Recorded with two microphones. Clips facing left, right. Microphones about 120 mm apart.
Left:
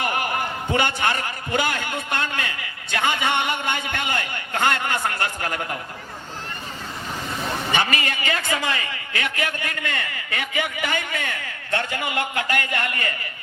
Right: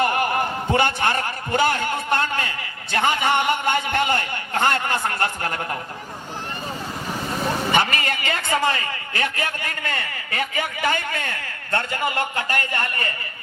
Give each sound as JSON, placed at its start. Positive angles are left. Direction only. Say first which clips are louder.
{"t": 0.0, "sound": "a man's voice", "louder": "right 4 dB", "side_deg": -35}
{"t": 7.9, "sound": "a man's voice", "louder": "even", "side_deg": -40}